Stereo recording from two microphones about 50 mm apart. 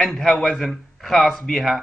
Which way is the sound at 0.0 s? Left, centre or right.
Centre.